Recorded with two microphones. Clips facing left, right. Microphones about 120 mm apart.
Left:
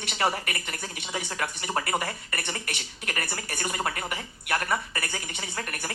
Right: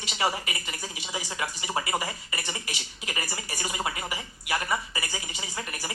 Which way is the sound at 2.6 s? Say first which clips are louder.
Left 2 dB; 55° left (ahead or behind).